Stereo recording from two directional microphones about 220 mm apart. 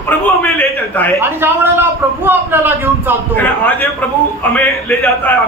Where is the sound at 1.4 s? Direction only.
10° right (ahead or behind).